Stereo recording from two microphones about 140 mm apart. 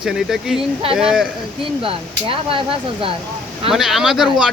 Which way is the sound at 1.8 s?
40° right (ahead or behind).